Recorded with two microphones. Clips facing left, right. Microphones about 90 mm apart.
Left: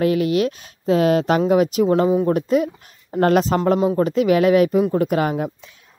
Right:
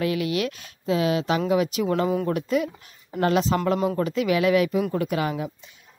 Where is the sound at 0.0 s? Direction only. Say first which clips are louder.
Left 7 dB; 35° left (ahead or behind).